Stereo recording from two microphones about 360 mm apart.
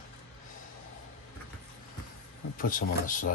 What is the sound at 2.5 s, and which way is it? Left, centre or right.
Speech, left.